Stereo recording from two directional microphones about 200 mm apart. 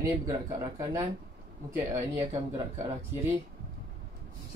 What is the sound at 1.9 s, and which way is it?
Speech, 15° right (ahead or behind).